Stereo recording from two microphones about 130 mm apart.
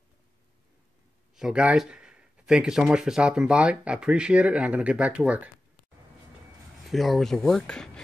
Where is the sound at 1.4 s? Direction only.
10° right (ahead or behind).